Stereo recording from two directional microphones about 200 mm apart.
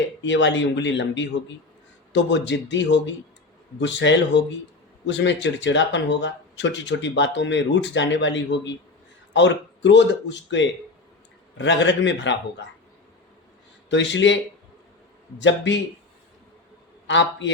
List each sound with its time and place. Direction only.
0.2 s speech: 65° left (ahead or behind)
13.9 s speech: 65° left (ahead or behind)
15.4 s speech: 65° left (ahead or behind)
17.1 s speech: 65° left (ahead or behind)